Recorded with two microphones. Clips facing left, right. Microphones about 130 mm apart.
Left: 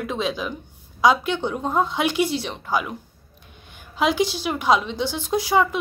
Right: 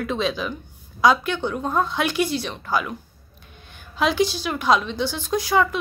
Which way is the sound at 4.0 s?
15° left (ahead or behind).